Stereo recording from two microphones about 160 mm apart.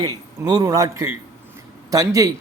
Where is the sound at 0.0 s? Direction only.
25° right (ahead or behind).